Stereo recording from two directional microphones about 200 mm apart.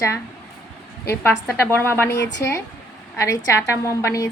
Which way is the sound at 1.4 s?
10° left (ahead or behind).